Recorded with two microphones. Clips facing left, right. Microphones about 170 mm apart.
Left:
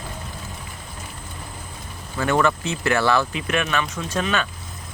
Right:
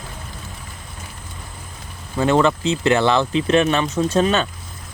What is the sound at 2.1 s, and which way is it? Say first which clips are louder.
Speech: right 4 dB; 20° right (ahead or behind).